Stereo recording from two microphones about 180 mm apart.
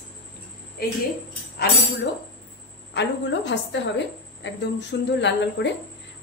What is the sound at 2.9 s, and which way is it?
A woman's voice, 80° left.